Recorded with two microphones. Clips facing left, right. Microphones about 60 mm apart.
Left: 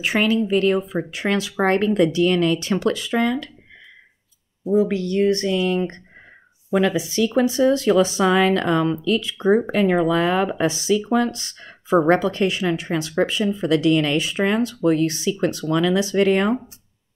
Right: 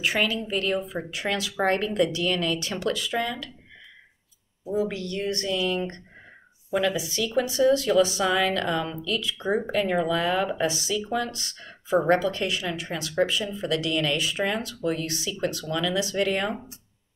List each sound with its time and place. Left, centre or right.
0.0 s speech: left
4.7 s speech: left